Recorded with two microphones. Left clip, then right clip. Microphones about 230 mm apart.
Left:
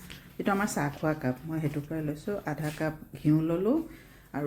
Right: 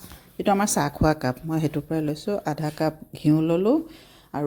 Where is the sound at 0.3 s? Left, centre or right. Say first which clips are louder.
Right 7 dB; right.